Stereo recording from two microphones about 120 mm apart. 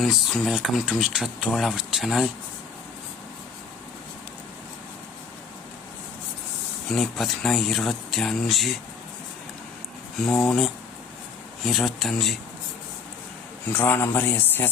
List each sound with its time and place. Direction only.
0.0 s speech: centre (ahead or behind)
6.8 s speech: 5° left (ahead or behind)
10.2 s speech: 5° left (ahead or behind)
13.7 s a man's voice: 15° left (ahead or behind)